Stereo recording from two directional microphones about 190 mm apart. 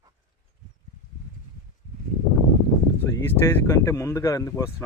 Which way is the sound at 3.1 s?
15° left (ahead or behind).